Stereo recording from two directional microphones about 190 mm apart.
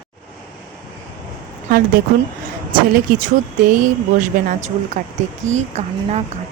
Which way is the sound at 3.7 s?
45° right (ahead or behind).